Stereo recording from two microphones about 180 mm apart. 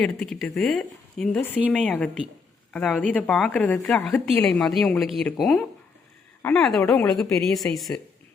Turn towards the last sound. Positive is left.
turn(degrees=0)  # may be behind; listen again after turning